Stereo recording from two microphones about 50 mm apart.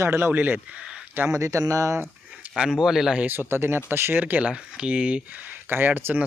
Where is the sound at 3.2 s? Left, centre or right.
Right.